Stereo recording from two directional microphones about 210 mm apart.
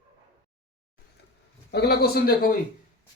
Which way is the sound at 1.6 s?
50° left (ahead or behind).